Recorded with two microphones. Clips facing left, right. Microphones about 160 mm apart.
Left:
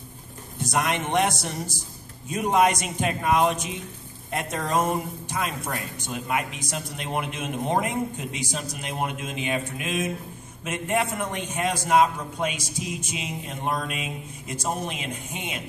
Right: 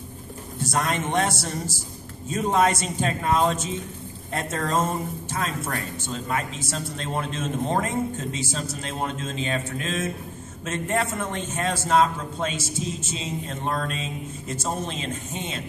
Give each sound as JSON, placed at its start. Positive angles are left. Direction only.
{"t": 0.6, "sound": "speech", "side_deg": 15}